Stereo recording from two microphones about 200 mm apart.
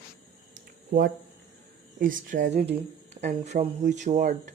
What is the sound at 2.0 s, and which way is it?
Speech, 40° right (ahead or behind).